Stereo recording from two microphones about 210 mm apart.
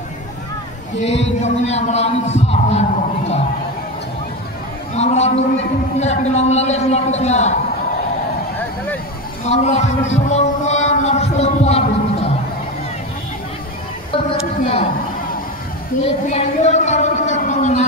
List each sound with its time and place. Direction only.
1.0 s speech: 30° left (ahead or behind)
4.9 s speech: 30° left (ahead or behind)
9.5 s speech: 30° left (ahead or behind)
14.1 s a sound: 25° left (ahead or behind)
14.6 s a woman's voice: 30° left (ahead or behind)
16.0 s speech: 40° left (ahead or behind)
16.3 s a sound: 30° left (ahead or behind)